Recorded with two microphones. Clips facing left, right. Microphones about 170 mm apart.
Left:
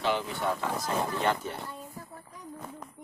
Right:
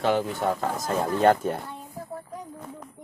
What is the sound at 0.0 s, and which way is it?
Speech, 50° right (ahead or behind).